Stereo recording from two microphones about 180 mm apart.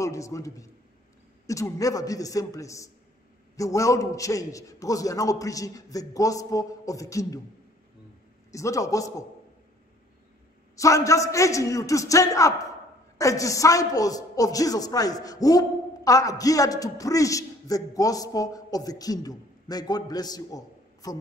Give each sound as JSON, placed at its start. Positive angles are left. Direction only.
{"t": 0.0, "sound": "a man's voice", "side_deg": 15}
{"t": 8.5, "sound": "a man's voice", "side_deg": 15}
{"t": 10.8, "sound": "a man's voice", "side_deg": 15}